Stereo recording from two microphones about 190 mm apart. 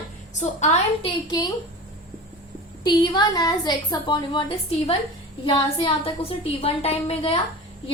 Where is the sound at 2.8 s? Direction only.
20° left (ahead or behind).